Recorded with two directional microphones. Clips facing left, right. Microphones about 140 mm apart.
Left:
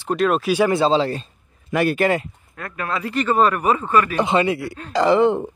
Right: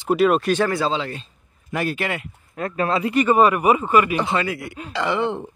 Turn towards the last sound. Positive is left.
turn(degrees=45)  # may be behind; listen again after turning